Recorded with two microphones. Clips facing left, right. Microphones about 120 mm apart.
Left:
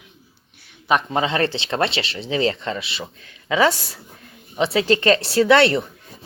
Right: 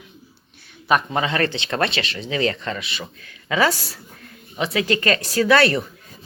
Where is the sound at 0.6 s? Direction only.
20° left (ahead or behind).